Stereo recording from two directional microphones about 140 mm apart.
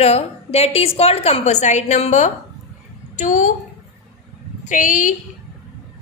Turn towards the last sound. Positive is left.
turn(degrees=65)  # may be behind; listen again after turning